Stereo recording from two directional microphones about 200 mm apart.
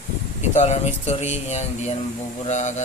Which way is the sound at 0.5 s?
35° left (ahead or behind).